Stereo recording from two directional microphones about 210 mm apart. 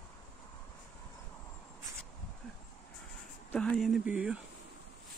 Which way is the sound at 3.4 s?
5° left (ahead or behind).